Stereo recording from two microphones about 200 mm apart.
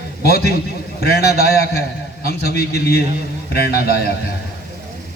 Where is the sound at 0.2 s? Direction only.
50° left (ahead or behind).